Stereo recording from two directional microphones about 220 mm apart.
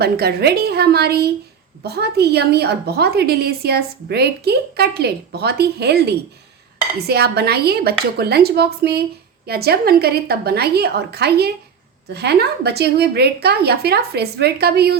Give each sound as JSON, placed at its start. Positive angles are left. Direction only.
{"t": 0.0, "sound": "a woman's voice", "side_deg": -45}